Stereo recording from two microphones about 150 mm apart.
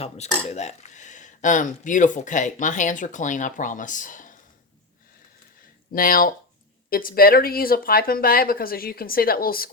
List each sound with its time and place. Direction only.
0.5 s speech: 50° left (ahead or behind)
5.9 s speech: 70° left (ahead or behind)